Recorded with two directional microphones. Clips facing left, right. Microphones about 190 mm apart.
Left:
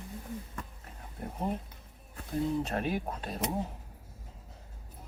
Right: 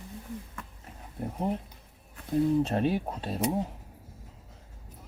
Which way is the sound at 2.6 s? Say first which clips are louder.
Right 5 dB; 30° right (ahead or behind).